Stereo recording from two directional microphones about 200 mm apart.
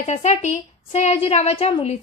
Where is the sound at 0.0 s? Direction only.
35° left (ahead or behind).